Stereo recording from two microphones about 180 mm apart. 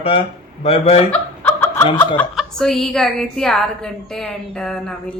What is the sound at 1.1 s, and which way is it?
Snicker, 10° left (ahead or behind).